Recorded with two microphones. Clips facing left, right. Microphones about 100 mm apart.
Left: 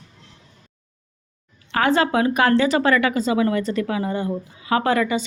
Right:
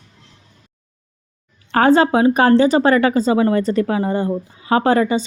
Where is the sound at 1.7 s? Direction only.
35° right (ahead or behind).